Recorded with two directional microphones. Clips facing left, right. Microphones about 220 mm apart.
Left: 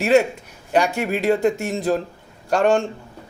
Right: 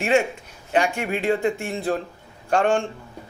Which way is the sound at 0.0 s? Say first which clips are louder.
Left 4 dB; 40° left (ahead or behind).